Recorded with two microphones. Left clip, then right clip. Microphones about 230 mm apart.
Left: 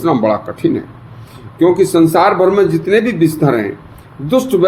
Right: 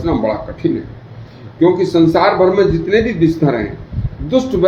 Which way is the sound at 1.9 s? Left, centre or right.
Left.